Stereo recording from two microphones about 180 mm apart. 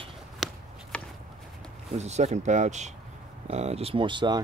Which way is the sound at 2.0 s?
40° right (ahead or behind).